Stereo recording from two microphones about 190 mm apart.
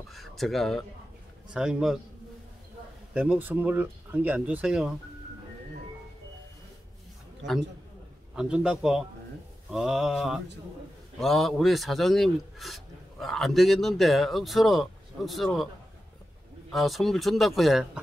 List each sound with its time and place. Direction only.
0.1 s speech: centre (ahead or behind)
3.2 s speech: 10° right (ahead or behind)
7.4 s a man's voice: 65° right (ahead or behind)
8.4 s speech: 5° right (ahead or behind)
16.7 s speech: centre (ahead or behind)